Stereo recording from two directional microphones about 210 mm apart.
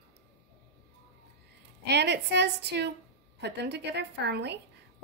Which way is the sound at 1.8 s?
55° right (ahead or behind).